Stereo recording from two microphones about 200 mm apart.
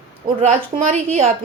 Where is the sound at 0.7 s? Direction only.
35° right (ahead or behind).